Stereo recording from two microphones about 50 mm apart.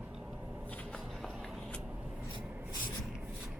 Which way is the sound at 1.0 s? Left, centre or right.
Centre.